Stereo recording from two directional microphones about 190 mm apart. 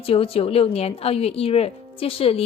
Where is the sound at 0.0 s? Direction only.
30° left (ahead or behind).